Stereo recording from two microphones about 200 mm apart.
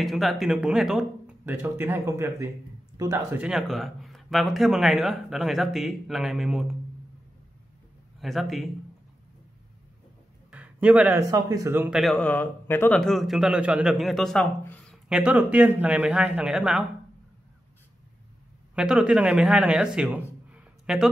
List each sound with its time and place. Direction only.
0.0 s speech: centre (ahead or behind); by 3.4 s 15° right (ahead or behind)
3.4 s speech: centre (ahead or behind)
8.2 s speech: centre (ahead or behind)
10.5 s speech: 5° right (ahead or behind)
15.0 s speech: 5° right (ahead or behind)
18.8 s a man's voice: 5° right (ahead or behind)